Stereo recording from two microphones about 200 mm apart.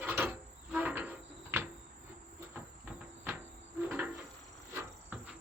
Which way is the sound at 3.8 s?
5° right (ahead or behind).